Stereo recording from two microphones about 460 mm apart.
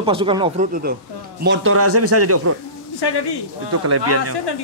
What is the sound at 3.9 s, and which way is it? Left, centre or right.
Speech, right.